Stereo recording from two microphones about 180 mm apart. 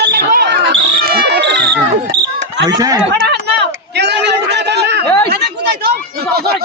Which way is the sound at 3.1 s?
70° right (ahead or behind).